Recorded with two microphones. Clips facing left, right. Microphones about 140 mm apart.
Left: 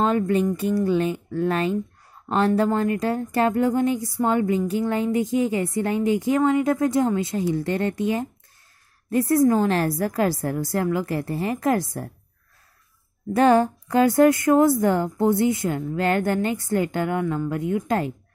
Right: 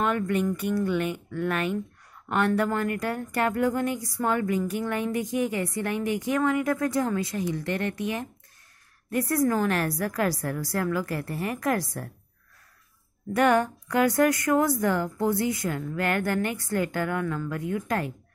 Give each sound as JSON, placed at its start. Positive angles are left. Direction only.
{"t": 0.0, "sound": "speech", "side_deg": 30}
{"t": 13.3, "sound": "speech", "side_deg": 30}